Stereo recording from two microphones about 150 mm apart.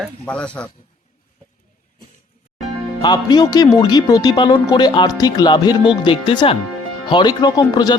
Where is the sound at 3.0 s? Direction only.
30° left (ahead or behind).